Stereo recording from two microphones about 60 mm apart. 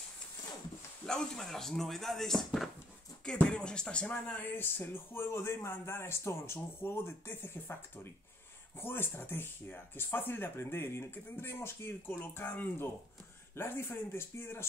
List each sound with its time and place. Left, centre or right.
1.0 s speech: centre
3.3 s speech: centre
4.1 s speech: left